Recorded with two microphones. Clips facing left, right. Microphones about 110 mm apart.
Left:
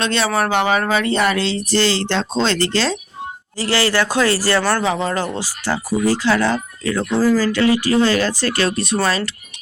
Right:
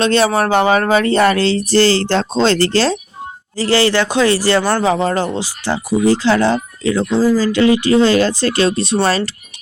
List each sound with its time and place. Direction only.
0.0 s speech: 35° right (ahead or behind)
3.9 s speech: 25° right (ahead or behind)
4.8 s speech: 35° right (ahead or behind)
5.3 s speech: 20° right (ahead or behind)